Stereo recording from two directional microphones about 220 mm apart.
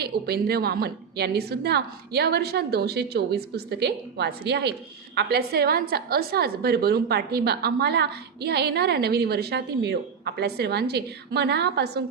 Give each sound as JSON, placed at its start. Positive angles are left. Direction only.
{"t": 0.0, "sound": "a woman's voice", "side_deg": -45}